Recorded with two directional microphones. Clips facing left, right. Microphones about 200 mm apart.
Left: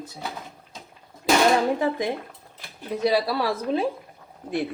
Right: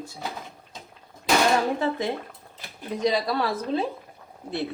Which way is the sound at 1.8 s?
15° left (ahead or behind).